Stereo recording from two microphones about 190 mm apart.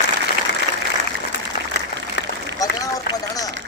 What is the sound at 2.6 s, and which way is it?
Run, 20° left (ahead or behind).